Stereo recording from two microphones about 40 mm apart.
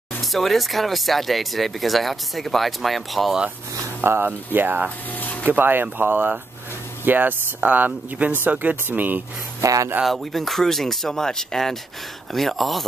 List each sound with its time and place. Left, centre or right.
0.2 s speech: centre
4.0 s speech: right
4.5 s speech: right
5.1 s speech: left
5.5 s speech: right
8.8 s speech: right
10.0 s speech: centre